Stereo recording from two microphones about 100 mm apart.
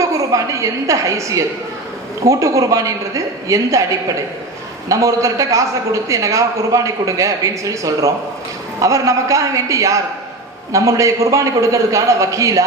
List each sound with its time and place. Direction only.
0.0 s a woman's voice: 30° right (ahead or behind)
4.9 s a man's voice: 35° right (ahead or behind)